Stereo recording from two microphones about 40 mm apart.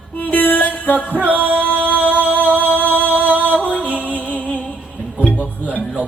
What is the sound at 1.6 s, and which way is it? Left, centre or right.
Music, left.